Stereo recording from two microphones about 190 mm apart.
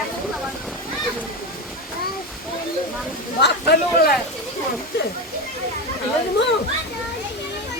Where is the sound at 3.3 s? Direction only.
60° left (ahead or behind).